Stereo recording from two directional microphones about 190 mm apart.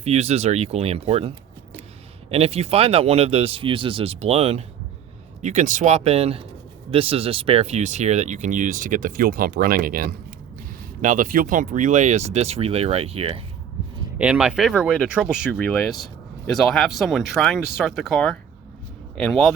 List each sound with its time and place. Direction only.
0.0 s speech: 35° right (ahead or behind)
2.3 s speech: 30° right (ahead or behind)
14.2 s speech: 5° right (ahead or behind)